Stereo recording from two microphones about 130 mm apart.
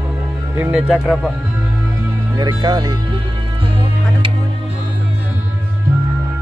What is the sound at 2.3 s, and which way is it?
Speech, 30° right (ahead or behind).